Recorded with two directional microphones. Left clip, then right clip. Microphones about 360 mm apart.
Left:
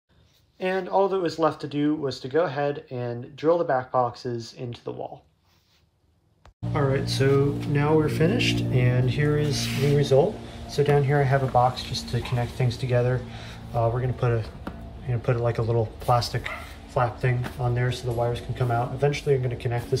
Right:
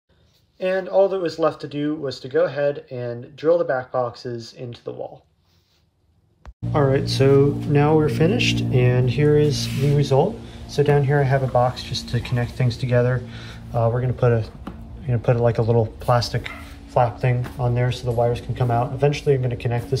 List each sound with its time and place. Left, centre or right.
0.6 s speech: centre
6.7 s speech: centre